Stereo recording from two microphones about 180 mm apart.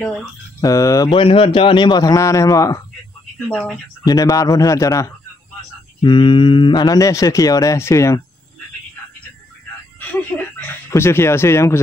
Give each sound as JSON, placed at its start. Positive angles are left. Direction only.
{"t": 0.6, "sound": "a man's voice", "side_deg": 20}
{"t": 3.4, "sound": "speech", "side_deg": 5}
{"t": 4.0, "sound": "a man's voice", "side_deg": 20}
{"t": 6.0, "sound": "a man's voice", "side_deg": 25}
{"t": 9.9, "sound": "a sound", "side_deg": 10}
{"t": 10.9, "sound": "speech", "side_deg": 15}